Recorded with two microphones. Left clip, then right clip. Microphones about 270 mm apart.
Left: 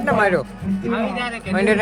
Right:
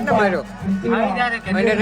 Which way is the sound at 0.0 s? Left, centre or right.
Left.